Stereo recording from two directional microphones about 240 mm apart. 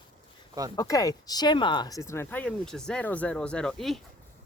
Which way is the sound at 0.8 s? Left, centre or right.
Centre.